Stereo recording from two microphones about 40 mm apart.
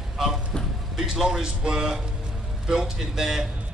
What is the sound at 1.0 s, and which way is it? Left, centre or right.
A man's voice, centre.